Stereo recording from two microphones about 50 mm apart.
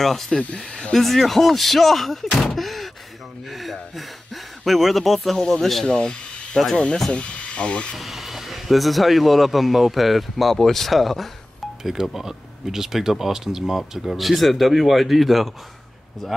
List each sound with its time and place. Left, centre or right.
0.0 s speech: centre
0.6 s speech: centre
0.9 s speech: centre
2.4 s gasp: centre
3.4 s a sound: centre
5.4 s speech: centre
5.9 s speech: centre
7.9 s speech: centre